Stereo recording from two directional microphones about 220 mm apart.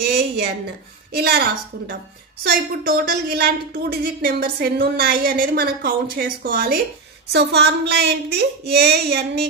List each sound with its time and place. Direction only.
0.0 s a woman's voice: 45° right (ahead or behind)